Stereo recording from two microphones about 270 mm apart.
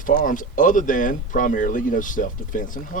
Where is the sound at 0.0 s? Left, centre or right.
Left.